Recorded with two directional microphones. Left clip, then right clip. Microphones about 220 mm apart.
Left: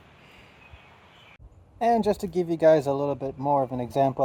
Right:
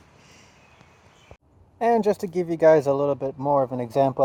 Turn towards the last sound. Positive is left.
turn(degrees=-25)  # may be behind; listen again after turning